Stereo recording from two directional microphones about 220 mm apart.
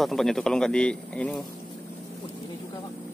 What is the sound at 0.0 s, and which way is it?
Speech, centre (ahead or behind).